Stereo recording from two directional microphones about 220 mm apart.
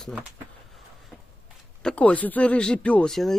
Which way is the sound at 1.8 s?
5° left (ahead or behind).